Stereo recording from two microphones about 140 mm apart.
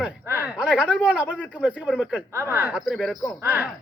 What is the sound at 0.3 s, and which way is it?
Speech, 15° right (ahead or behind).